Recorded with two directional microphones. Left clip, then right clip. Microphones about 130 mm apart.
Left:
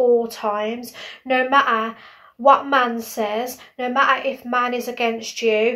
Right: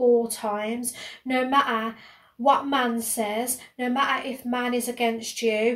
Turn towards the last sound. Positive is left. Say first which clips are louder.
# left 5 dB
turn(degrees=-25)  # may be behind; listen again after turning